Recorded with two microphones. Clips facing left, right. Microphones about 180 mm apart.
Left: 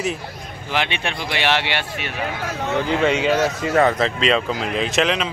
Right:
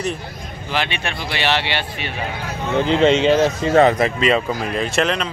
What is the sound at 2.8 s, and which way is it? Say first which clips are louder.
Speech: right 5 dB; 25° right (ahead or behind).